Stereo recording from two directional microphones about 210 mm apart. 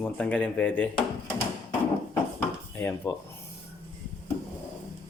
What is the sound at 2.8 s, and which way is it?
Speech, 10° left (ahead or behind).